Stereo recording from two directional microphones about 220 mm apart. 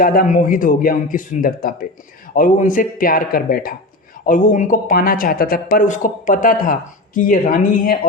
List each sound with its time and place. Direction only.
0.0 s speech: 40° left (ahead or behind)